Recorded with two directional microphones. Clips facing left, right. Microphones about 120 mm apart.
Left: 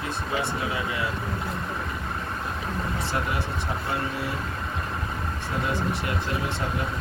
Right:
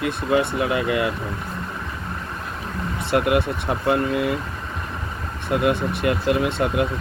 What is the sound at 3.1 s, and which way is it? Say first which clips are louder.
Speech: right 13 dB; 80° right.